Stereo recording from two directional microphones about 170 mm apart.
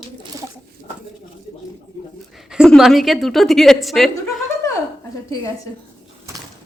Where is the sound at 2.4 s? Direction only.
Centre (ahead or behind).